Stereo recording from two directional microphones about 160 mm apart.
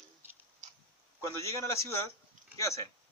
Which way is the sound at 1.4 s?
20° left (ahead or behind).